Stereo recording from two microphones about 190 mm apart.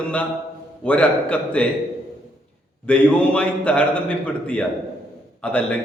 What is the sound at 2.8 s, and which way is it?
A man's voice, 5° left (ahead or behind).